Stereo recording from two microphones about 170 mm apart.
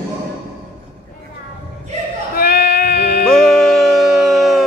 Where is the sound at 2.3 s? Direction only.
60° left (ahead or behind).